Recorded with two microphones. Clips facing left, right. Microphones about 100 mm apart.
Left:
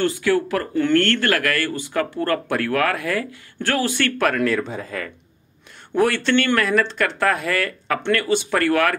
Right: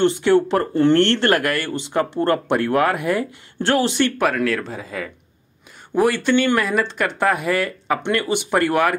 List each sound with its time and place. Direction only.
0.0 s speech: 25° right (ahead or behind)
4.3 s speech: centre (ahead or behind); by 8.9 s 15° right (ahead or behind)